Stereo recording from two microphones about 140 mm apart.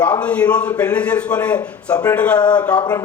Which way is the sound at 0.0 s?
10° left (ahead or behind).